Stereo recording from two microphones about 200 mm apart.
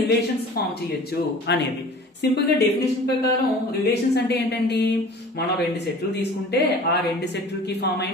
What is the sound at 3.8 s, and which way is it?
Speech, 55° left (ahead or behind).